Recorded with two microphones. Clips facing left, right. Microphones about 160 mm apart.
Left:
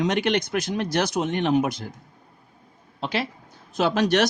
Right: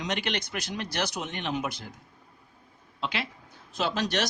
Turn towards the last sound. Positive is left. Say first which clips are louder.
# left 8 dB
turn(degrees=55)  # may be behind; listen again after turning